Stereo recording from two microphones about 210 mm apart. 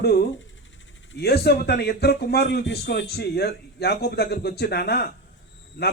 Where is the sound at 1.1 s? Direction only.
50° left (ahead or behind).